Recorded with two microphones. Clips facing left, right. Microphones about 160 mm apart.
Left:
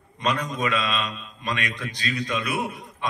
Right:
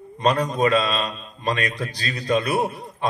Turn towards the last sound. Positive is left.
turn(degrees=-35)  # may be behind; listen again after turning